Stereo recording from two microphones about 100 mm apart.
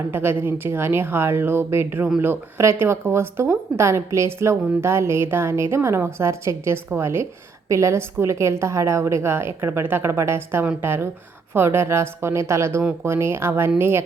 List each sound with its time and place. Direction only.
0.1 s speech: 20° right (ahead or behind)